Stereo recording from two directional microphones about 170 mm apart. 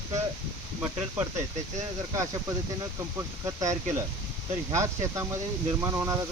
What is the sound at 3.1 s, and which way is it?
Speech, 20° right (ahead or behind).